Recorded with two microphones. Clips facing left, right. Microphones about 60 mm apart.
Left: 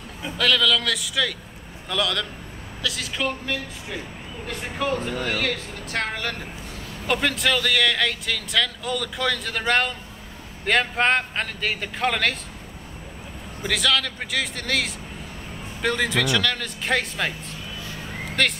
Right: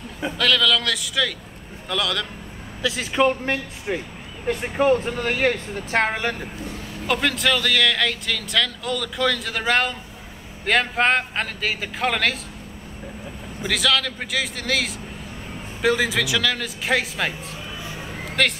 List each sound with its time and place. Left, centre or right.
0.4 s speech: centre
2.8 s speech: right
7.1 s speech: centre
13.7 s speech: centre
18.4 s speech: centre